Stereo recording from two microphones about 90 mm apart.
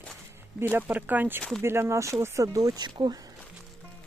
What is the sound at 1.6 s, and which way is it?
Speech, 30° right (ahead or behind).